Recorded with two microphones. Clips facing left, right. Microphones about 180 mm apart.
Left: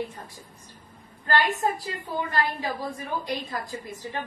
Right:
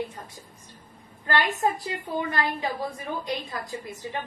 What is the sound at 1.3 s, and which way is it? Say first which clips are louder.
Speech: even; 20° right (ahead or behind).